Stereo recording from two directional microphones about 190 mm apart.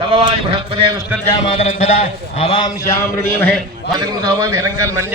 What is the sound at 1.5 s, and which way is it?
Speech, 35° left (ahead or behind).